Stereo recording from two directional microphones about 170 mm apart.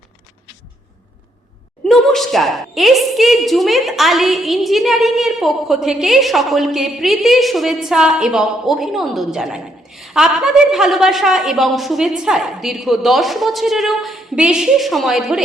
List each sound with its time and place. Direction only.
1.9 s a woman's voice: centre (ahead or behind)